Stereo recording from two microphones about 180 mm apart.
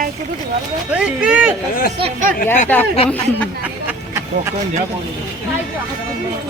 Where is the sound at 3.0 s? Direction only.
5° left (ahead or behind).